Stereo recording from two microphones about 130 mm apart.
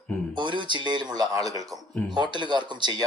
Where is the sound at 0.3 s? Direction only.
40° right (ahead or behind).